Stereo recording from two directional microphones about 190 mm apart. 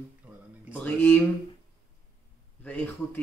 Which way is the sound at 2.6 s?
10° left (ahead or behind).